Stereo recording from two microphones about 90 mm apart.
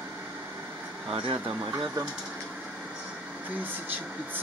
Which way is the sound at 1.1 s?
70° right (ahead or behind).